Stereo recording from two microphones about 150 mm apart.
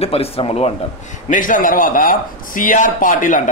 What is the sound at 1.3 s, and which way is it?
Speech, 65° left (ahead or behind).